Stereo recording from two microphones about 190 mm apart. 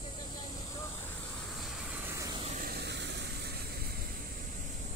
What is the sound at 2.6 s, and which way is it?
Vehicle, 60° right (ahead or behind).